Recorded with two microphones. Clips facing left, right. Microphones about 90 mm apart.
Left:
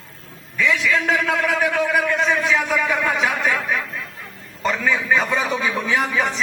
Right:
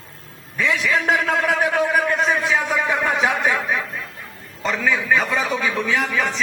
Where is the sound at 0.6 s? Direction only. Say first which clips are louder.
Left 1 dB; 30° right (ahead or behind).